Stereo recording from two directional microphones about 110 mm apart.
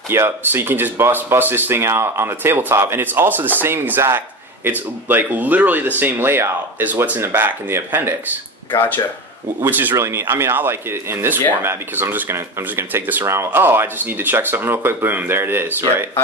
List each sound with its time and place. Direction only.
0.1 s speech: 20° right (ahead or behind)
8.7 s speech: 15° left (ahead or behind)
9.6 s speech: 15° right (ahead or behind)